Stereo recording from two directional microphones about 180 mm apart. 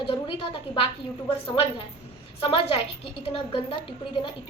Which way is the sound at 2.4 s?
30° left (ahead or behind).